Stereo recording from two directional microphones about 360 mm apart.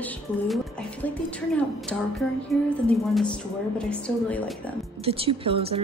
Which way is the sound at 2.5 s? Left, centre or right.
Centre.